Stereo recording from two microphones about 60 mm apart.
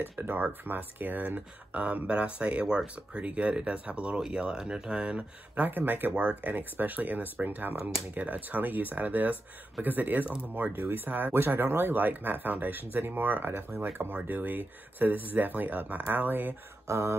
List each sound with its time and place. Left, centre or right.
0.2 s speech: right; by 5.7 s centre
5.7 s speech: right
16.8 s speech: right